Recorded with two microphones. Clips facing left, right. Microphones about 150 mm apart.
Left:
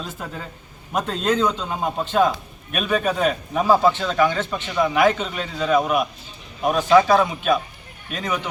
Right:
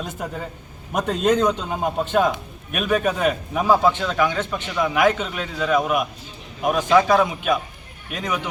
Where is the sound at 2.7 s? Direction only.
5° right (ahead or behind).